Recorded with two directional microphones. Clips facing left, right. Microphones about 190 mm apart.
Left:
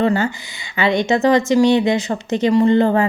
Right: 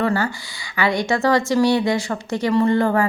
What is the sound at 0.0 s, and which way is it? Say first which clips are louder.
A woman's voice: left 3 dB; 20° left (ahead or behind).